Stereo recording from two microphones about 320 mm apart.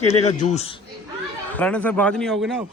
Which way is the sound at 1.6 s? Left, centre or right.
Centre.